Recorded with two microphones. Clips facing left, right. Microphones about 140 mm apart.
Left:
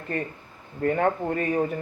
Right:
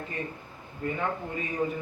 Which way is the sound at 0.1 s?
60° left (ahead or behind).